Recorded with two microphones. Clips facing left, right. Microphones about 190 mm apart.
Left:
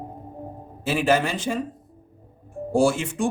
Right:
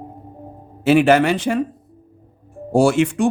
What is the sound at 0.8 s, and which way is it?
Speech, 70° right (ahead or behind).